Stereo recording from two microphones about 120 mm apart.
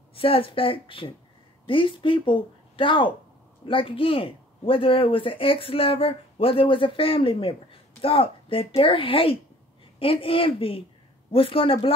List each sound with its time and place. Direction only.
0.1 s speech: 50° left (ahead or behind)